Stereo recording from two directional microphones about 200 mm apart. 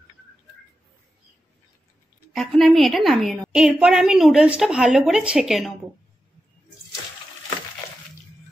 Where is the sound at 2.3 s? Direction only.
Centre (ahead or behind).